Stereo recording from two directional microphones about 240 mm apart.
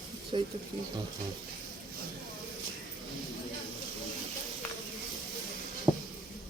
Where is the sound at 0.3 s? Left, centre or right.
Right.